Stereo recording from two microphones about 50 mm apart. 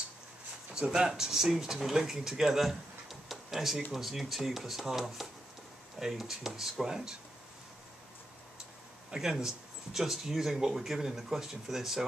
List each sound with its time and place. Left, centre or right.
0.7 s speech: centre
9.1 s speech: centre